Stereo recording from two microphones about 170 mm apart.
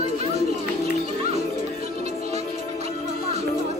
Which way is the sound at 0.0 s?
40° right (ahead or behind).